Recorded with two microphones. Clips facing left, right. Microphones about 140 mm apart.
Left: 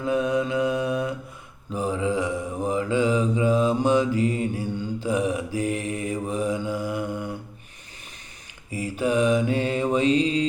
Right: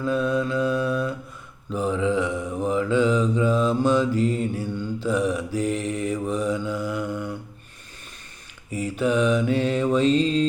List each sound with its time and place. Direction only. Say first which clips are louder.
0.0 s mantra: even; 15° left (ahead or behind)
6.7 s mantra: even; 50° left (ahead or behind)
7.1 s a sound: right 1 dB; 15° left (ahead or behind)
8.7 s mantra: right 1 dB; 10° left (ahead or behind)